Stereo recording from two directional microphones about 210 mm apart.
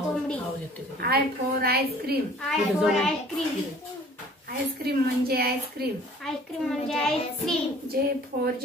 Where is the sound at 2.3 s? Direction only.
Centre (ahead or behind).